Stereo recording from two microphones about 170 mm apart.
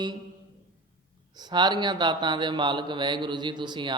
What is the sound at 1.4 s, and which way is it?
Mantra, 25° right (ahead or behind).